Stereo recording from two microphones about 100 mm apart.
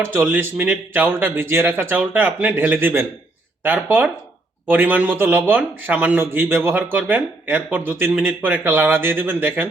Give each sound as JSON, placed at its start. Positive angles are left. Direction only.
{"t": 0.0, "sound": "a man's voice", "side_deg": -20}